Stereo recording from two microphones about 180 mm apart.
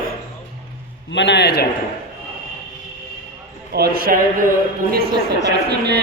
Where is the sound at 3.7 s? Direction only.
60° right (ahead or behind).